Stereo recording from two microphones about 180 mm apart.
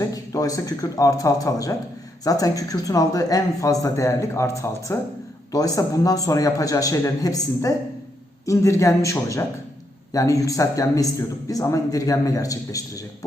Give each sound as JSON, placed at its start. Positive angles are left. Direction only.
{"t": 0.0, "sound": "a man's voice", "side_deg": 20}